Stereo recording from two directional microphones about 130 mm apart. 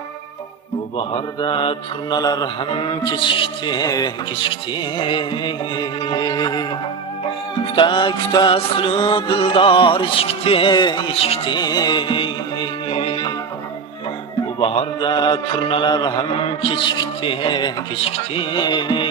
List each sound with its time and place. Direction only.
0.9 s mantra: 40° left (ahead or behind)
2.1 s a man's voice: 30° left (ahead or behind)
7.7 s a man's voice: 40° left (ahead or behind)
11.5 s music: 30° left (ahead or behind)
14.6 s a man's voice: 45° left (ahead or behind)